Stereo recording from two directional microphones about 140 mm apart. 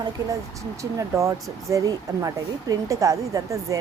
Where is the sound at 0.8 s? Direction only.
20° right (ahead or behind).